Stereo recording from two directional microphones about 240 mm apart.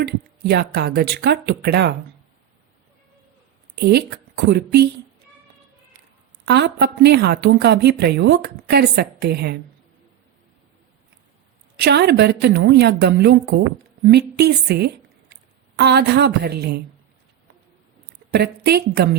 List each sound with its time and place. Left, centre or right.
0.0 s a woman's voice: right
3.8 s a woman's voice: right
6.4 s a woman's voice: right
11.8 s a woman's voice: right
18.3 s a woman's voice: right